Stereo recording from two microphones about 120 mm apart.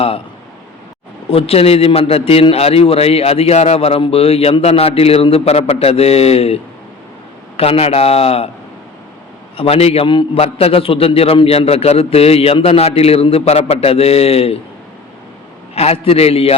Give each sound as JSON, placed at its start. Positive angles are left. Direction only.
{"t": 1.3, "sound": "a man's voice", "side_deg": 55}
{"t": 9.6, "sound": "a man's voice", "side_deg": 55}
{"t": 15.7, "sound": "a man's voice", "side_deg": 55}